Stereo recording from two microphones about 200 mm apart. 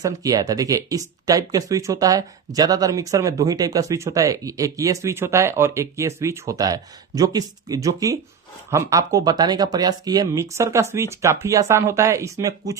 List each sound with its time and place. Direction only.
0.0 s speech: 15° right (ahead or behind)